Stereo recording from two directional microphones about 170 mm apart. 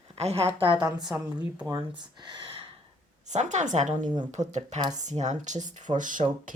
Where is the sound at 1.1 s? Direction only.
10° right (ahead or behind).